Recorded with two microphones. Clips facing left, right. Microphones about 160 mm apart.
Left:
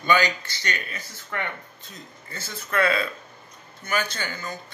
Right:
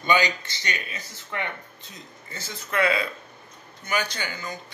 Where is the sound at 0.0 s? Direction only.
20° right (ahead or behind).